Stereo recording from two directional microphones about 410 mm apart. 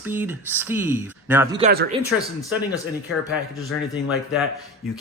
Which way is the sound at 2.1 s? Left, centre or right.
Centre.